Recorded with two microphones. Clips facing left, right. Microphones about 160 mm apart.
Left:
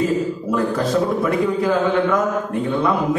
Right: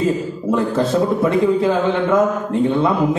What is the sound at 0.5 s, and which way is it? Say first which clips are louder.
A man's voice: right 4 dB; 25° right (ahead or behind).